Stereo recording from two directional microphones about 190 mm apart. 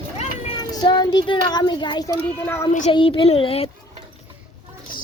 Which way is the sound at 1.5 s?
25° left (ahead or behind).